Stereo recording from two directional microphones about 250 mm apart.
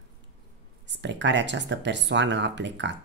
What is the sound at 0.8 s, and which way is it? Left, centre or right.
Speech, right.